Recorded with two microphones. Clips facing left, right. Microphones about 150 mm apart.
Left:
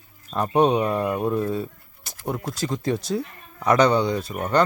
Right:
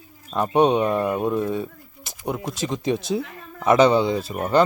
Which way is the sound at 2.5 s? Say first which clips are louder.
Right 1 dB; 20° right (ahead or behind).